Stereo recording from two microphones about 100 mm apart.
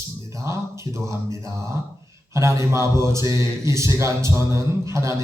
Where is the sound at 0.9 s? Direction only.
30° right (ahead or behind).